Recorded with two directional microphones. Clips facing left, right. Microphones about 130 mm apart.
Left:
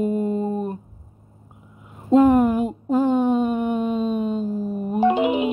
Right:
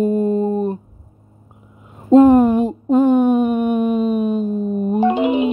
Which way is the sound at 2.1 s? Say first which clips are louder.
Right 5 dB; 35° right (ahead or behind).